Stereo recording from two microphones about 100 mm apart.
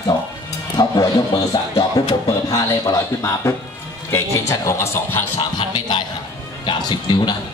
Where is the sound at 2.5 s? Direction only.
30° left (ahead or behind).